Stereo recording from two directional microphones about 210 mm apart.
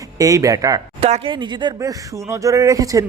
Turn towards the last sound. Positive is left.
turn(degrees=-15)  # may be behind; listen again after turning